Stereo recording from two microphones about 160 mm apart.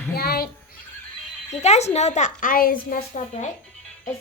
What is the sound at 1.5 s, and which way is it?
A woman's voice, 45° left (ahead or behind).